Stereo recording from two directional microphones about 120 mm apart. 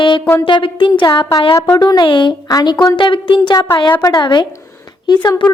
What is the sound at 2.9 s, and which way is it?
Speech, 40° left (ahead or behind).